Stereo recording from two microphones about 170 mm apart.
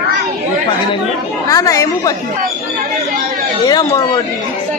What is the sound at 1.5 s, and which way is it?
Speech, 20° left (ahead or behind).